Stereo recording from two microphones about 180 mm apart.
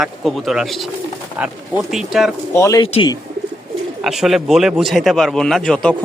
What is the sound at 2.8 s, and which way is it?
Speech, 30° left (ahead or behind).